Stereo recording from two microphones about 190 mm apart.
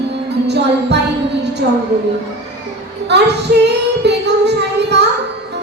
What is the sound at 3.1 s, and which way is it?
Child singing, 60° right (ahead or behind).